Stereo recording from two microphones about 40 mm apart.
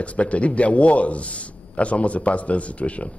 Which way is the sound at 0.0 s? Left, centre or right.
Left.